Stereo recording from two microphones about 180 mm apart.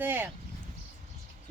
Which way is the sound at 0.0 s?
10° right (ahead or behind).